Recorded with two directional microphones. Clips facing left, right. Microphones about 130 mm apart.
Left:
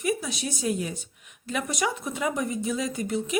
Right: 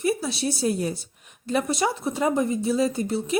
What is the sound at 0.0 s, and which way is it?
A woman's voice, 30° right (ahead or behind).